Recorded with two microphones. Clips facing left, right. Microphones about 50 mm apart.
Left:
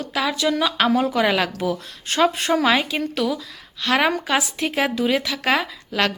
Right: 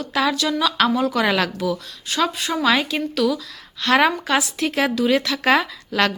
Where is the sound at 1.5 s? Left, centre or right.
Left.